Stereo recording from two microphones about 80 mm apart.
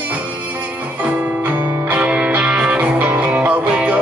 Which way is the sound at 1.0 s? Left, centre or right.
Right.